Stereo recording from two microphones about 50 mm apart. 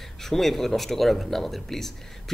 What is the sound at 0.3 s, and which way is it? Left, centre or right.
Speech, centre.